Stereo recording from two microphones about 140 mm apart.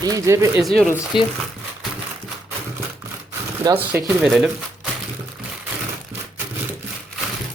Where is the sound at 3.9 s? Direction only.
15° right (ahead or behind).